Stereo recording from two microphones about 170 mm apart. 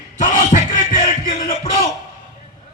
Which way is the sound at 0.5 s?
50° left (ahead or behind).